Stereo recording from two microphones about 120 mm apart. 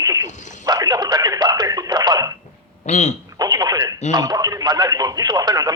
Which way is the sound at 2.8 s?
70° left (ahead or behind).